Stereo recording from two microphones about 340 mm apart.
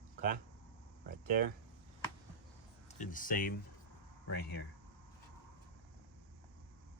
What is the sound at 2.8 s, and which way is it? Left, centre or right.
Speech, left.